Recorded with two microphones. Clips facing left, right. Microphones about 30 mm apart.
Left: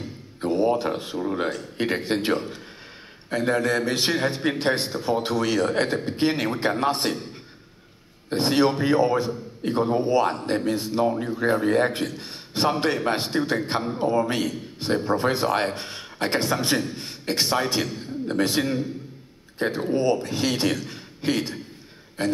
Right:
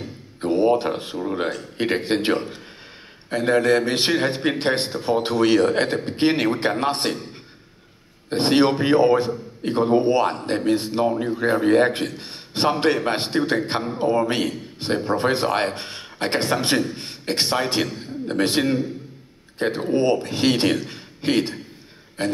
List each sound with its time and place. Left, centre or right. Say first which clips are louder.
0.4 s a man's voice: right 3 dB; right
4.9 s speech: right 3 dB; right
5.2 s a man's voice: right 9 dB; right
8.3 s a man's voice: right 3 dB; right